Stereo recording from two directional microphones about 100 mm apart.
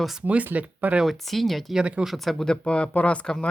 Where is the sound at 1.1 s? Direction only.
Centre (ahead or behind).